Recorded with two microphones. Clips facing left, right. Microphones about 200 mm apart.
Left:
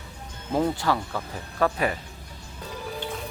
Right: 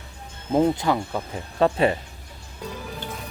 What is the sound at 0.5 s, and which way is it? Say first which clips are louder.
Speech: right 4 dB; 20° right (ahead or behind).